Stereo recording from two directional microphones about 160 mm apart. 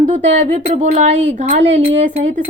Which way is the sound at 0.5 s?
45° right (ahead or behind).